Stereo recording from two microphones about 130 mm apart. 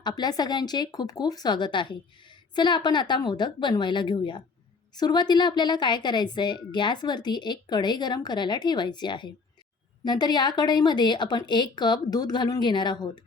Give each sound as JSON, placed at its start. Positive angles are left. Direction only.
{"t": 0.0, "sound": "a woman's voice", "side_deg": 30}